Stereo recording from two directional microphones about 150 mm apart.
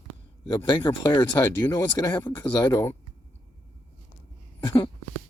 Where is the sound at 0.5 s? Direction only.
30° left (ahead or behind).